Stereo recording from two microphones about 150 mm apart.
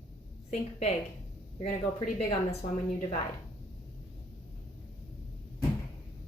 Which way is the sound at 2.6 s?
55° left (ahead or behind).